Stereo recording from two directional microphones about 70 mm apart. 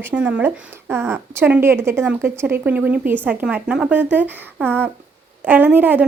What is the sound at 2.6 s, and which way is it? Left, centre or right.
Speech, right.